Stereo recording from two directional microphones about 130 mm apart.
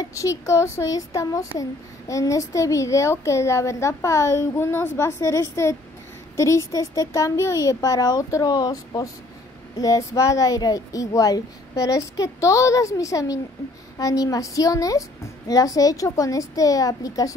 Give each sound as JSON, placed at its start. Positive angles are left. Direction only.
{"t": 0.0, "sound": "a child's voice", "side_deg": 25}